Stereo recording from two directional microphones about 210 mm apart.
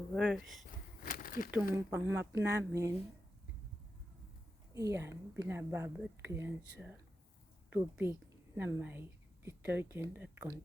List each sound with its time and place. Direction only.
0.1 s speech: 5° right (ahead or behind)
1.0 s crumpling: 40° left (ahead or behind)
1.7 s speech: 10° right (ahead or behind)
4.7 s a woman's voice: 15° right (ahead or behind)